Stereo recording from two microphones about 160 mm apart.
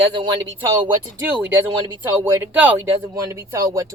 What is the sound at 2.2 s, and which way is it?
Speech, 10° right (ahead or behind).